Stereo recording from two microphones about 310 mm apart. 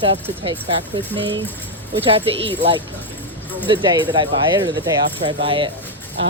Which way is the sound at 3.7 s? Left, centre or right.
Centre.